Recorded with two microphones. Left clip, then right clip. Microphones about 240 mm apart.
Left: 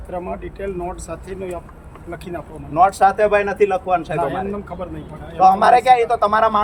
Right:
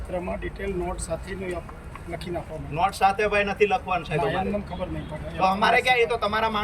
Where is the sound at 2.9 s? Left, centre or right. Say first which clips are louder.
Left 7 dB; left.